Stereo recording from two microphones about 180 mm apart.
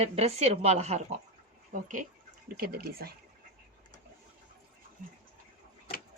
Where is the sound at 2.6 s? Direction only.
55° right (ahead or behind).